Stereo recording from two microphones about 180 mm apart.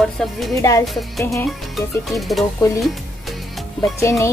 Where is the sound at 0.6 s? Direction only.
20° left (ahead or behind).